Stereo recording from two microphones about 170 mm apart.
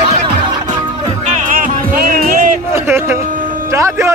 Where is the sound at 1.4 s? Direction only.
55° right (ahead or behind).